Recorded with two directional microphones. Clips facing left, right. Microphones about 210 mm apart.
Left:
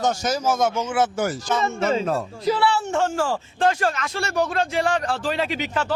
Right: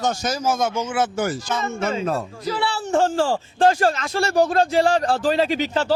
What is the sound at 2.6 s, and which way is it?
Speech, 35° right (ahead or behind).